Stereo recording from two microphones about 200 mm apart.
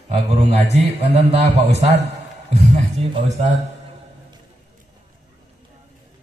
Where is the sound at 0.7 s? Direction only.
35° right (ahead or behind).